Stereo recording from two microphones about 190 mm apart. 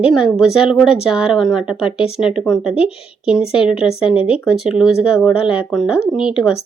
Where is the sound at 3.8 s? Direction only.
30° left (ahead or behind).